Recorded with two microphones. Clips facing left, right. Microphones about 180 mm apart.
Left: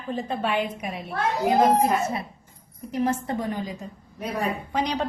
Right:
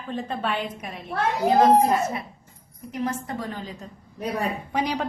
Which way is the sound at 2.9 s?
30° left (ahead or behind).